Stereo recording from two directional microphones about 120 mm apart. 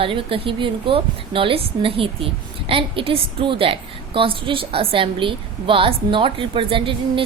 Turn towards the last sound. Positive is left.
turn(degrees=-45)  # may be behind; listen again after turning